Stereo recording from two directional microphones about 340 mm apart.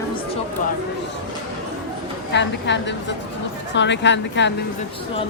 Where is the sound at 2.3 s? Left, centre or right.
Left.